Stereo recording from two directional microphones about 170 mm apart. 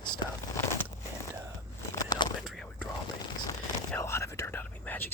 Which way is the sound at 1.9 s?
25° left (ahead or behind).